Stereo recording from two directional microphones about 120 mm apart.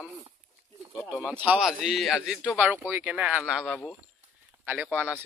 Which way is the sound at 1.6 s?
Centre (ahead or behind).